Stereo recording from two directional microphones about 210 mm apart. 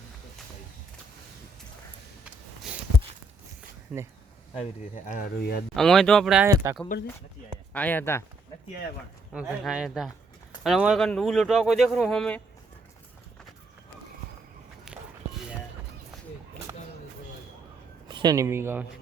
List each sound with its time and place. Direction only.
2.7 s a sound: 5° right (ahead or behind)
3.9 s speech: centre (ahead or behind)
5.0 s speech: 45° left (ahead or behind)
5.7 s speech: centre (ahead or behind)
6.9 s speech: 45° left (ahead or behind)
7.7 s speech: 10° left (ahead or behind)
9.3 s speech: 5° right (ahead or behind)
14.9 s walk: 5° right (ahead or behind)
18.1 s speech: 20° right (ahead or behind)